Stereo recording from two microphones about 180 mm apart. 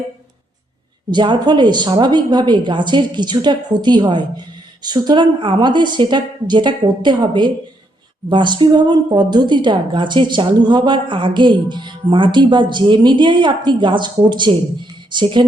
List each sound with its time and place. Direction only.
1.1 s a woman's voice: 25° right (ahead or behind)